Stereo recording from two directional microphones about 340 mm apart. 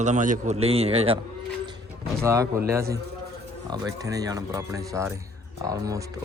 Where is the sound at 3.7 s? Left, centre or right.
Centre.